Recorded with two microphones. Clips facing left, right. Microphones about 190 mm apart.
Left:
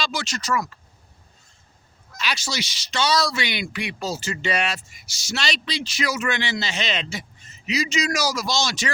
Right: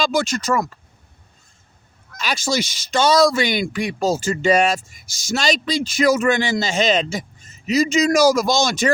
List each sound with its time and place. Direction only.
0.0 s speech: 50° right (ahead or behind)
2.1 s speech: 50° right (ahead or behind)